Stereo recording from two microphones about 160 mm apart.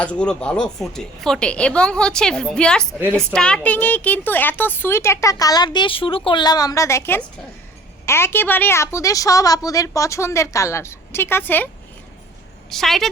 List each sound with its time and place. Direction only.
0.0 s a woman's voice: 5° left (ahead or behind)
12.7 s a woman's voice: centre (ahead or behind)